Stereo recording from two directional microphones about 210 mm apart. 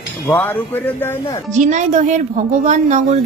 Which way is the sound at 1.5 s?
35° right (ahead or behind).